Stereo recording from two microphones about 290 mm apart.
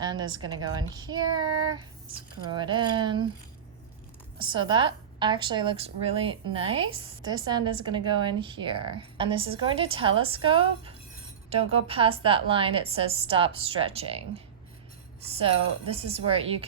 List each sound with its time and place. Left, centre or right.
0.0 s a woman's voice: centre
4.4 s a woman's voice: centre